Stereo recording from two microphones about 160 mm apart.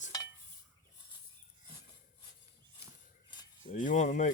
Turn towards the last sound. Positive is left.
turn(degrees=50)  # may be behind; listen again after turning